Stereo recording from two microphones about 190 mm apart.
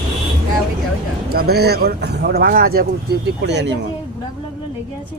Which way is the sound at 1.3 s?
55° right (ahead or behind).